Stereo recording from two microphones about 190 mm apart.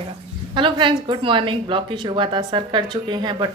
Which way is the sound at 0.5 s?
25° right (ahead or behind).